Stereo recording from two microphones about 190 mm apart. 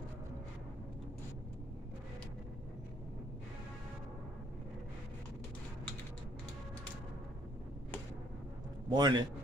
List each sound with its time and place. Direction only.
8.8 s a man's voice: 20° right (ahead or behind)